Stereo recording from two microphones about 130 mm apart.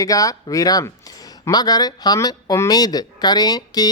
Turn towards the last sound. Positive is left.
turn(degrees=30)  # may be behind; listen again after turning